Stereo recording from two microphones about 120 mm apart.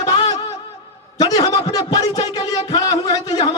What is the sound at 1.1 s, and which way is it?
A man's voice, 30° left (ahead or behind).